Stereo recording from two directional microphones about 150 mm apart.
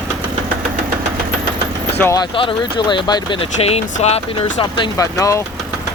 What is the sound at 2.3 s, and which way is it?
Speech, 35° left (ahead or behind).